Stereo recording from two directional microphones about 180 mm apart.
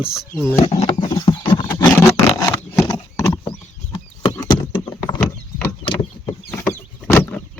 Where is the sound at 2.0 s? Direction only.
15° left (ahead or behind).